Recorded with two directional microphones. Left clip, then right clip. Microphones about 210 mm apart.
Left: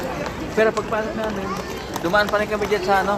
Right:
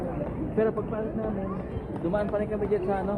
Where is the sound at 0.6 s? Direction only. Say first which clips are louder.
Left 8 dB; 20° left (ahead or behind).